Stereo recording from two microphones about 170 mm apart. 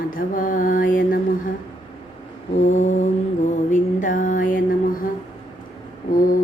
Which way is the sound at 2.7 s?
45° left (ahead or behind).